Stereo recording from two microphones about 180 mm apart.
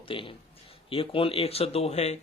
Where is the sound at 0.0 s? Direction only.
30° left (ahead or behind).